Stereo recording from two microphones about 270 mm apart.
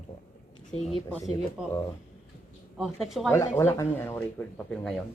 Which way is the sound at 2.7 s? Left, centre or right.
Centre.